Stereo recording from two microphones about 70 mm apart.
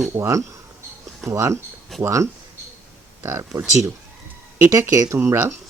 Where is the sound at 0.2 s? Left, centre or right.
Right.